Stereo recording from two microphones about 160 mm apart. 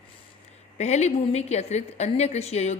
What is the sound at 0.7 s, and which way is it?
A woman's voice, 45° left (ahead or behind).